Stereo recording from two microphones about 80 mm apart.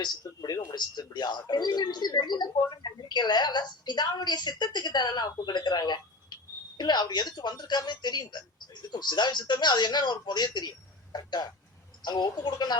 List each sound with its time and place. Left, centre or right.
0.0 s speech: left